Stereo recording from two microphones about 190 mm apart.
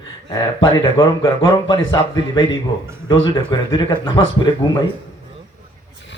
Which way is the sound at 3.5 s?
25° left (ahead or behind).